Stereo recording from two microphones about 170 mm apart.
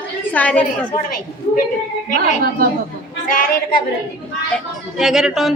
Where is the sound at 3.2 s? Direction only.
55° left (ahead or behind).